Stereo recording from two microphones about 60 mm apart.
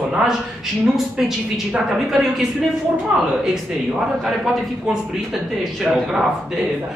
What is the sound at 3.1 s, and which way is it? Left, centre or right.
Speech, centre.